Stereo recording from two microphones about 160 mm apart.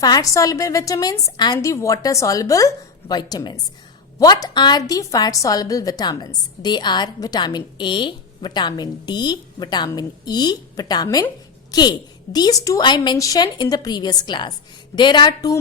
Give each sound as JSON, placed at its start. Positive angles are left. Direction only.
{"t": 0.0, "sound": "a woman's voice", "side_deg": 20}